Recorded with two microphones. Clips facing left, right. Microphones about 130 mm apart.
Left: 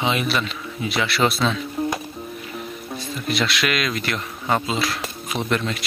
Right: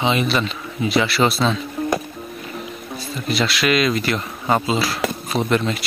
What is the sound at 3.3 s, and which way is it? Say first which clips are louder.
Speech: right 3 dB; centre (ahead or behind).